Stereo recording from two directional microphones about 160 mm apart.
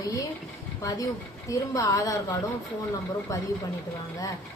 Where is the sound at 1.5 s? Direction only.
20° left (ahead or behind).